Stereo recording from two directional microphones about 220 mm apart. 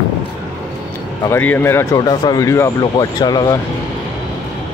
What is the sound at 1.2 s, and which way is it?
Speech, 10° left (ahead or behind).